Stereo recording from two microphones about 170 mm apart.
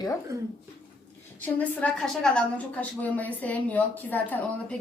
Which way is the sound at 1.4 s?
10° left (ahead or behind).